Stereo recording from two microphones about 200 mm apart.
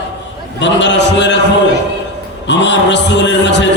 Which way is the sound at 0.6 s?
60° left (ahead or behind).